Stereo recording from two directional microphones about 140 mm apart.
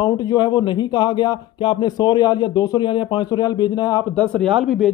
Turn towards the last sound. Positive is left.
turn(degrees=0)  # may be behind; listen again after turning